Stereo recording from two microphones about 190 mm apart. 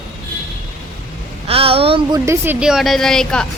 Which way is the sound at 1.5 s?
30° right (ahead or behind).